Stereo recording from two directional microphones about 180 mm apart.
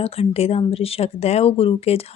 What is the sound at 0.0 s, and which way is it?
Speech, 35° left (ahead or behind).